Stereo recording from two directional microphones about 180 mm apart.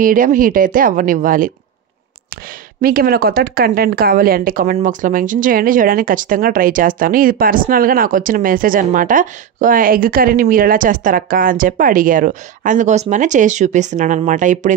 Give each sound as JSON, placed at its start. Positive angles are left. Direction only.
{"t": 0.0, "sound": "speech", "side_deg": -50}
{"t": 2.8, "sound": "speech", "side_deg": -55}